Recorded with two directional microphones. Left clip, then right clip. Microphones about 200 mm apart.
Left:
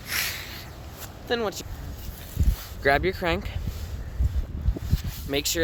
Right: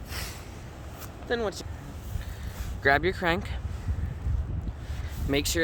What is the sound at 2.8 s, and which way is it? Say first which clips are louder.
Speech: left 1 dB; centre (ahead or behind).